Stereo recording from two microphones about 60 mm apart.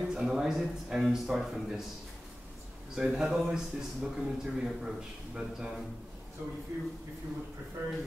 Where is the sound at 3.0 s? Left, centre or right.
Centre.